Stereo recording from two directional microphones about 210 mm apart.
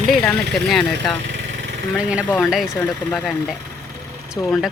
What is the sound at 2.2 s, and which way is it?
Speech, 5° left (ahead or behind).